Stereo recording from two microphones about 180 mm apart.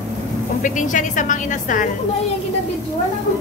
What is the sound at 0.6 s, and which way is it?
A woman's voice, 45° left (ahead or behind).